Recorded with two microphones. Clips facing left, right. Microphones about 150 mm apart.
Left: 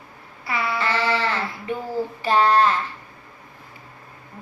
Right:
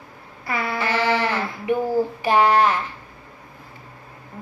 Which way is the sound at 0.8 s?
15° right (ahead or behind).